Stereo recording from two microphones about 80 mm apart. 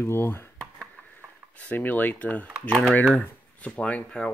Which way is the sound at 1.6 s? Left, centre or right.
Centre.